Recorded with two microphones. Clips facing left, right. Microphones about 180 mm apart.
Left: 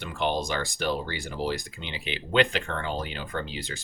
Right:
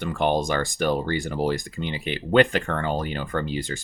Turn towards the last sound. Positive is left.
turn(degrees=-50)  # may be behind; listen again after turning